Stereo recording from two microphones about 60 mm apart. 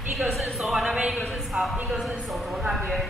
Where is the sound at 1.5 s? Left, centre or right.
Right.